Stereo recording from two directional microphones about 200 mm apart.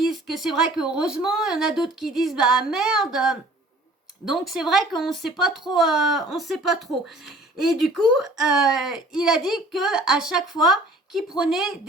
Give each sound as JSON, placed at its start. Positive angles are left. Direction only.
{"t": 0.1, "sound": "speech", "side_deg": 0}